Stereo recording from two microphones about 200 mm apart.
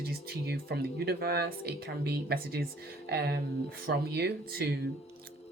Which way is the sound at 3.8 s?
50° right (ahead or behind).